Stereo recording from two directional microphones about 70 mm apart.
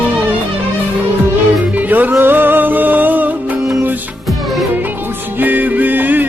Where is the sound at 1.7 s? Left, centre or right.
Right.